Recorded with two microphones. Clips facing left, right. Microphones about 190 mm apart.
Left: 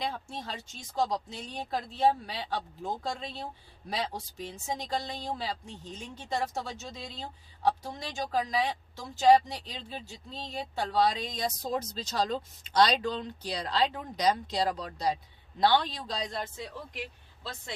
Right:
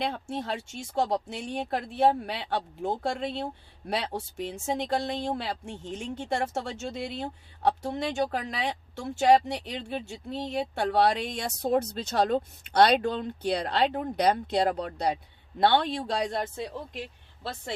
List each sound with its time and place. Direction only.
0.0 s speech: 65° right (ahead or behind)